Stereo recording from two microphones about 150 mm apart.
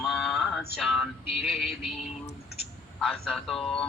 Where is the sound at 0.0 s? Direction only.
Centre (ahead or behind).